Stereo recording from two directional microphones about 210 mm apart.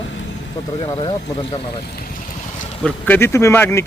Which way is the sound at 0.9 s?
20° left (ahead or behind).